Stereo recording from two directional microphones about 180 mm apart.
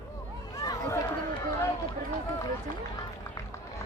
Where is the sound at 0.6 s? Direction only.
20° left (ahead or behind).